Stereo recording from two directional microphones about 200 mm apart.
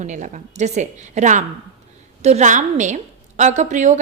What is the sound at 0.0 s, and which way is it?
A woman's voice, 35° right (ahead or behind).